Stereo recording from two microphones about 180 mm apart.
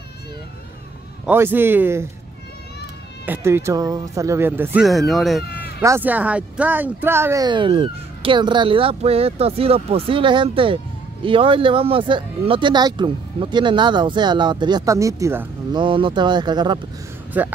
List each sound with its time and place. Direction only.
1.2 s speech: 10° right (ahead or behind)
3.3 s speech: 15° right (ahead or behind)
4.8 s speech: centre (ahead or behind)
5.8 s speech: 15° right (ahead or behind)
7.4 s speech: 30° right (ahead or behind)
15.8 s speech: 25° right (ahead or behind)
17.3 s speech: 10° right (ahead or behind)